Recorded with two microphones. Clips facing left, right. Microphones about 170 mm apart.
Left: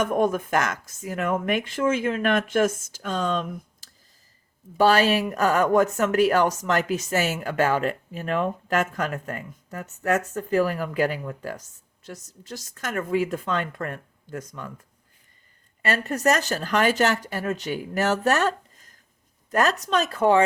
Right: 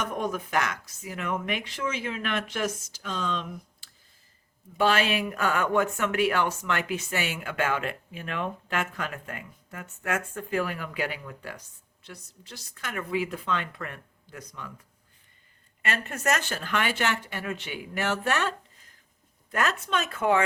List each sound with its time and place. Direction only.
0.0 s speech: 50° left (ahead or behind)
15.8 s speech: 35° left (ahead or behind)